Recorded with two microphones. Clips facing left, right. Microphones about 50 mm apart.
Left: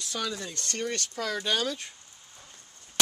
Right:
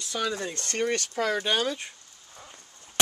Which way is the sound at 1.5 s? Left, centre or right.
Centre.